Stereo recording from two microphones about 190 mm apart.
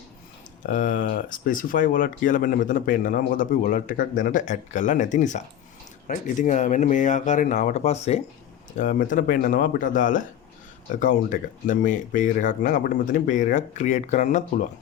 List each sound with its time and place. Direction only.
0.6 s speech: 45° left (ahead or behind)